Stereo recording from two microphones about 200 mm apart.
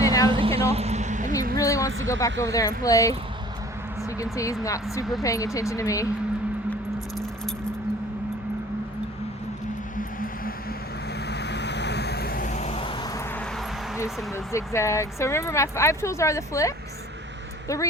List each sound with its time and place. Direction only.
0.0 s vehicle: 15° left (ahead or behind)
0.3 s vehicle: 25° right (ahead or behind)
0.7 s a sound: 30° right (ahead or behind)
1.5 s a sound: 15° left (ahead or behind)
2.0 s speech: 15° left (ahead or behind)
4.2 s speech: 15° left (ahead or behind)
11.3 s vehicle: 60° left (ahead or behind); by 13.2 s 25° left (ahead or behind)
14.3 s speech: 15° left (ahead or behind)